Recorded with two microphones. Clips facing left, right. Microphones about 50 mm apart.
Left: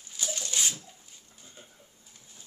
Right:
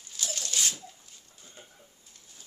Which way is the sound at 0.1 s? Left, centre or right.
Centre.